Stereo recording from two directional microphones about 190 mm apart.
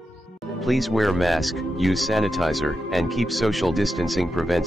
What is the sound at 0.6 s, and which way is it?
Speech, centre (ahead or behind).